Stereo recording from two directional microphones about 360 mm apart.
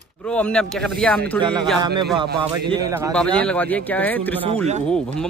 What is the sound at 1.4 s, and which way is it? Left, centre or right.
Speech, centre.